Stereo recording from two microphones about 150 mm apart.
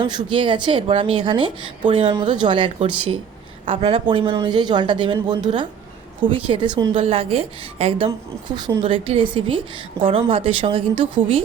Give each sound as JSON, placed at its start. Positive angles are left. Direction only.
{"t": 0.0, "sound": "speech", "side_deg": -30}
{"t": 7.0, "sound": "speech", "side_deg": -40}